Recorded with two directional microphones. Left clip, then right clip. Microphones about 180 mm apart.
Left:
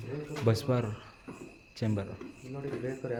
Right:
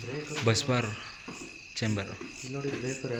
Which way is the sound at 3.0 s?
25° right (ahead or behind).